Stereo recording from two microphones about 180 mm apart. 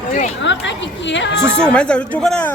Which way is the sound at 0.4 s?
90° left.